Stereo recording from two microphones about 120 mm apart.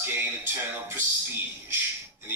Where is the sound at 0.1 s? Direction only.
20° right (ahead or behind).